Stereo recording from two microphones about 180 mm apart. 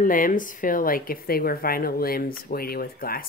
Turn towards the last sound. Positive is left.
turn(degrees=55)  # may be behind; listen again after turning